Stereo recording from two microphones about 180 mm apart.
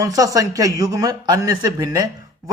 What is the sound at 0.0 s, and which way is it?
A man's voice, 20° right (ahead or behind).